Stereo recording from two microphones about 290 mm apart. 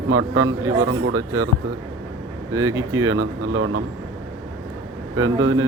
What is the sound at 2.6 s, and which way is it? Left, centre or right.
Speech, right.